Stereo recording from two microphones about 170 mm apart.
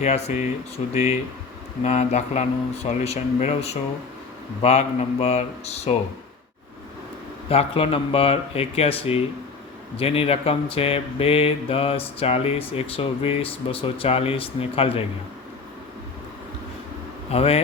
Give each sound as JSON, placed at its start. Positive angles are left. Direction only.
{"t": 0.0, "sound": "speech", "side_deg": 40}
{"t": 7.5, "sound": "speech", "side_deg": 35}
{"t": 17.3, "sound": "speech", "side_deg": 35}